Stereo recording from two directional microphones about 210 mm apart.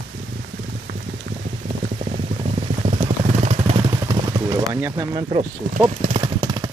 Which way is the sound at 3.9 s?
20° right (ahead or behind).